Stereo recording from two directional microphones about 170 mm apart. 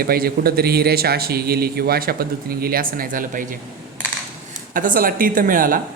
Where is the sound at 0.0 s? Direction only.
60° right (ahead or behind).